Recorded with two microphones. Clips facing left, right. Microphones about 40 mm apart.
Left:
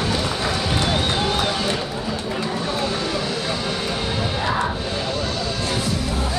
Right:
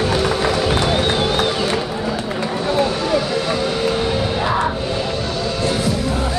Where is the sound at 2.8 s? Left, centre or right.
Centre.